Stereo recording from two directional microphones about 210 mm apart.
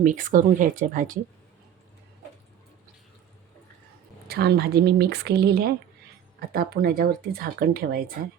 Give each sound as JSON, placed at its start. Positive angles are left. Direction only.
{"t": 0.0, "sound": "speech", "side_deg": -40}
{"t": 4.3, "sound": "speech", "side_deg": -50}